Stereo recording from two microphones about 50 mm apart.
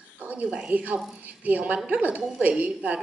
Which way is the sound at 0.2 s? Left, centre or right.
Right.